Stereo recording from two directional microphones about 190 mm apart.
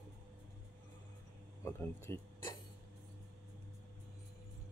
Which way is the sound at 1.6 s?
15° left (ahead or behind).